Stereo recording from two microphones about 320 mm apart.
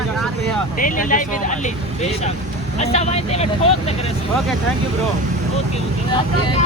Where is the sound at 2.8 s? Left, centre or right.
Centre.